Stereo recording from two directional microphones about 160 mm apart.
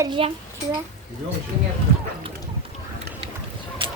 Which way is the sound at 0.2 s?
35° right (ahead or behind).